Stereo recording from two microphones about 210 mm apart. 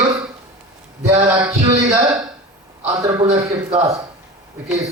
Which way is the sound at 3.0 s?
20° right (ahead or behind).